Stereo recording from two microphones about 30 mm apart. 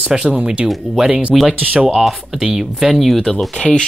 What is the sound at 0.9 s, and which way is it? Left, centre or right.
Speech, centre.